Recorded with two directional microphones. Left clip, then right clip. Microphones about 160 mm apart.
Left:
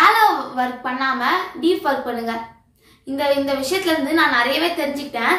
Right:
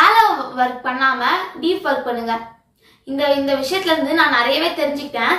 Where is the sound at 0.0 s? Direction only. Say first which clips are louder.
Right 2 dB; 20° left (ahead or behind).